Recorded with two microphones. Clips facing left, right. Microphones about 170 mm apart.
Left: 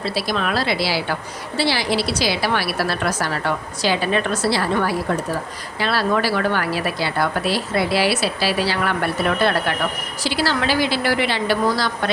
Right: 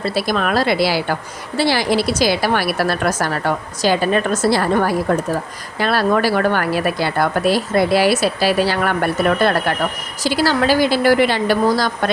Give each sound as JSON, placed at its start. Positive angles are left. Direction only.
{"t": 0.0, "sound": "a woman's voice", "side_deg": -50}